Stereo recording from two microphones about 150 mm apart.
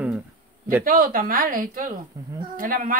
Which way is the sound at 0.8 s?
65° right (ahead or behind).